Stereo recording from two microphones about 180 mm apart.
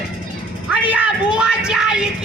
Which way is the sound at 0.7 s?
5° right (ahead or behind).